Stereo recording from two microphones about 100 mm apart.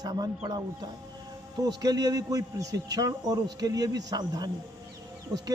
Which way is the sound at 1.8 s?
40° right (ahead or behind).